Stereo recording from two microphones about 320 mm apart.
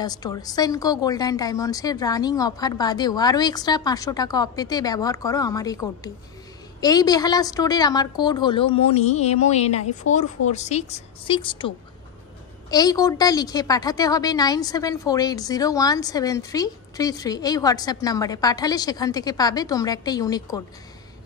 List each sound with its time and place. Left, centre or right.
0.0 s a woman's voice: centre
12.7 s a woman's voice: centre